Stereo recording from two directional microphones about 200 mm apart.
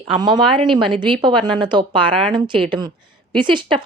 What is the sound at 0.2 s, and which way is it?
A woman's voice, 20° right (ahead or behind).